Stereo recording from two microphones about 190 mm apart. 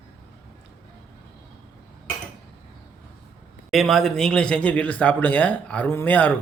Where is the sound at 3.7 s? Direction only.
Centre (ahead or behind).